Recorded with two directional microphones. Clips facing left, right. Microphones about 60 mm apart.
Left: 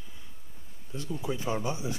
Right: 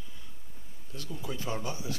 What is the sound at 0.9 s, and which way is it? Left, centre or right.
Speech, left.